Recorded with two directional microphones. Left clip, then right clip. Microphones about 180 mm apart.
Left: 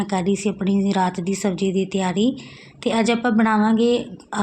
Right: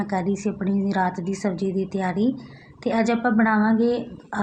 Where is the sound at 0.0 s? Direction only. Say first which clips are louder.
Left 3 dB; 30° left (ahead or behind).